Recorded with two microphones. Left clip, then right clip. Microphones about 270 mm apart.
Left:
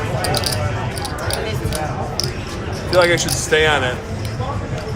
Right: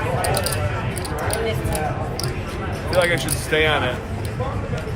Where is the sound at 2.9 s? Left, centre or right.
Left.